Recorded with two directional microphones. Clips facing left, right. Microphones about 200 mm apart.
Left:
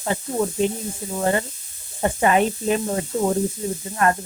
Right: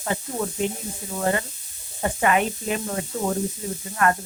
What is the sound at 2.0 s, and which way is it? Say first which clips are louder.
A woman's voice: left 3 dB; 30° left (ahead or behind).